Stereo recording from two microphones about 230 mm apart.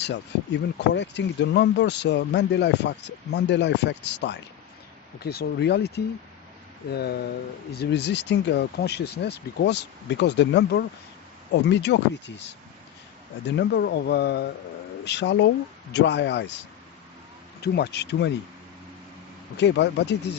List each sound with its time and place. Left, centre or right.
0.0 s speech: left
13.6 s speech: left
17.6 s speech: left
19.5 s speech: left